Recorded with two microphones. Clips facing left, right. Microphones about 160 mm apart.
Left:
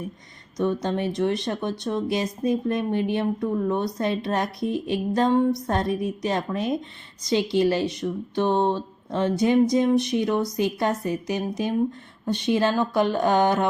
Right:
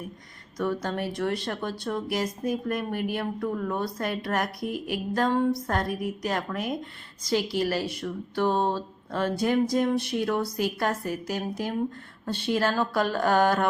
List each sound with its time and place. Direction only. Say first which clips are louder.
0.5 s speech: left 4 dB; 20° left (ahead or behind)